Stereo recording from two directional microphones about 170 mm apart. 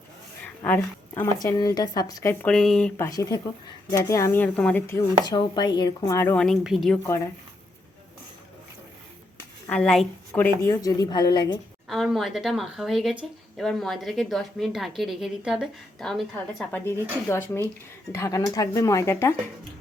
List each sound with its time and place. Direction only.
0.4 s a sound: 10° left (ahead or behind)
1.4 s a woman's voice: 20° left (ahead or behind)
2.4 s a woman's voice: 5° left (ahead or behind)
3.0 s a woman's voice: 20° left (ahead or behind)
5.2 s a woman's voice: 25° left (ahead or behind)
6.3 s a woman's voice: centre (ahead or behind)
9.6 s a woman's voice: 5° left (ahead or behind); by 11.6 s 25° left (ahead or behind)
11.9 s a woman's voice: centre (ahead or behind)
17.2 s speech: 15° left (ahead or behind)